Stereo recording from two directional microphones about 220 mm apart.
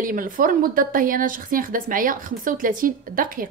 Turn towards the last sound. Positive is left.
turn(degrees=-40)  # may be behind; listen again after turning